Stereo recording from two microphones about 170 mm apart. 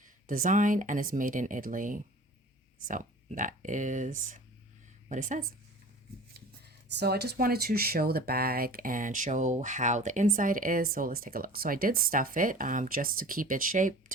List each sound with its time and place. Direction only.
0.0 s a woman's voice: 50° right (ahead or behind)
6.9 s speech: 75° right (ahead or behind); by 13.9 s 50° right (ahead or behind)